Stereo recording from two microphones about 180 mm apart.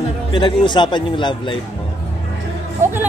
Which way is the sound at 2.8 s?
45° right (ahead or behind).